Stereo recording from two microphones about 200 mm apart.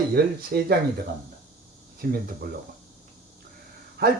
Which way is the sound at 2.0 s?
50° right (ahead or behind).